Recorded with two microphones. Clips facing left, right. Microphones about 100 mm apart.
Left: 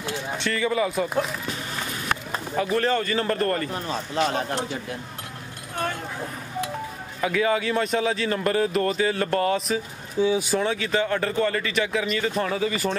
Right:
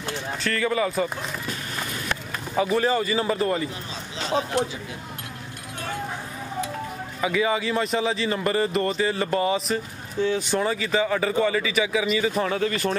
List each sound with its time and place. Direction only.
0.4 s speech: centre (ahead or behind)
2.5 s a man's voice: 5° right (ahead or behind)
7.2 s speech: centre (ahead or behind)